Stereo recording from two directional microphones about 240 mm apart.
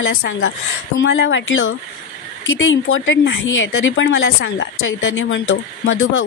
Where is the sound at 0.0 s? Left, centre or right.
Left.